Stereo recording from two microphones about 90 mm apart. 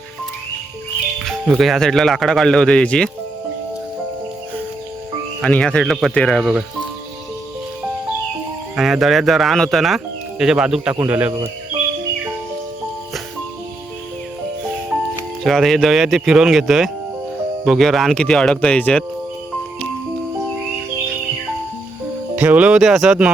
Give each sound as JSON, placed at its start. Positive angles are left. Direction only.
{"t": 1.5, "sound": "speech", "side_deg": 0}
{"t": 5.4, "sound": "speech", "side_deg": 10}
{"t": 6.4, "sound": "speech", "side_deg": -10}
{"t": 8.7, "sound": "speech", "side_deg": 0}
{"t": 15.4, "sound": "speech", "side_deg": 5}
{"t": 22.4, "sound": "speech", "side_deg": -15}
{"t": 22.8, "sound": "speech", "side_deg": -5}